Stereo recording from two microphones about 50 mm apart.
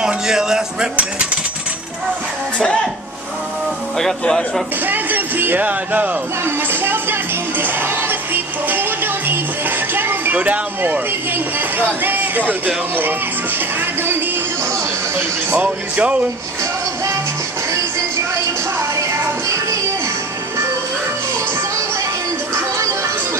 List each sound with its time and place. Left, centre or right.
0.0 s a man's voice: centre
4.2 s a man's voice: centre
4.8 s a sound: right
6.4 s music: right
10.3 s speech: right
11.3 s speech: right
15.5 s speech: right